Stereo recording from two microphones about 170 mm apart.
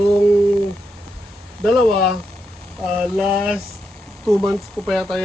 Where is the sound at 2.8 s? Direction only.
Centre (ahead or behind).